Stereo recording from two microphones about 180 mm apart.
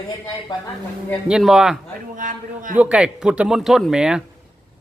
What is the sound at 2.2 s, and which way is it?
Speech, 50° right (ahead or behind).